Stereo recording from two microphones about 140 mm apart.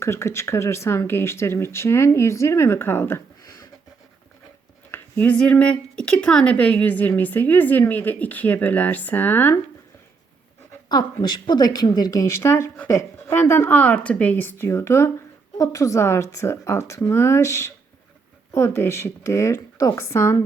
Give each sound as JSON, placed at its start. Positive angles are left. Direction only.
{"t": 0.0, "sound": "speech", "side_deg": 20}
{"t": 4.9, "sound": "speech", "side_deg": 15}
{"t": 10.8, "sound": "speech", "side_deg": 30}